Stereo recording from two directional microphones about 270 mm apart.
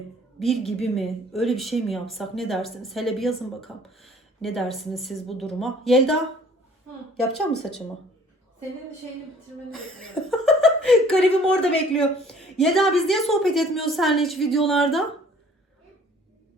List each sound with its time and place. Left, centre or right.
0.3 s a woman's voice: centre
7.2 s speech: centre
9.7 s speech: centre